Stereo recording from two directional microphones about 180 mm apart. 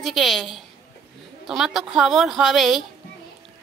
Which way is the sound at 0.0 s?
Centre (ahead or behind).